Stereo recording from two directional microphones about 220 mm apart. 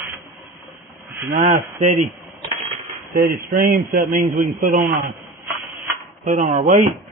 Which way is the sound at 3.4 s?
40° right (ahead or behind).